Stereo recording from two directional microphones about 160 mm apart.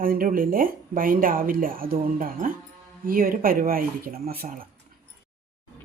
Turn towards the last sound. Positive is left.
turn(degrees=-70)  # may be behind; listen again after turning